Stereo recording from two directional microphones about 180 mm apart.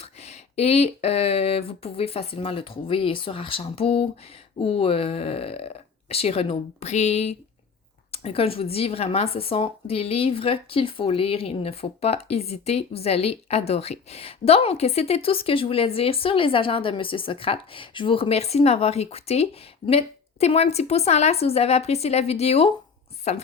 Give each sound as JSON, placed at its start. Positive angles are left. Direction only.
{"t": 0.0, "sound": "speech", "side_deg": 35}